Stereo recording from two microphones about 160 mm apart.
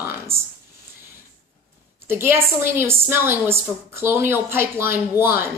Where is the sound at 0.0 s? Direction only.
15° right (ahead or behind).